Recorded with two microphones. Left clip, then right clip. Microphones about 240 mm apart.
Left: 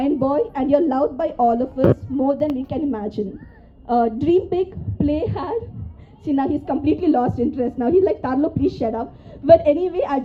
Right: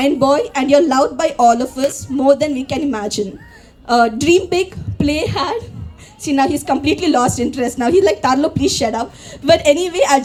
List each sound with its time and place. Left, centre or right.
0.0 s a woman's voice: right